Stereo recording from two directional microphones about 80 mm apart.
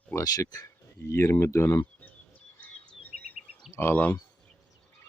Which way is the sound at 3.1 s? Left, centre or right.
Centre.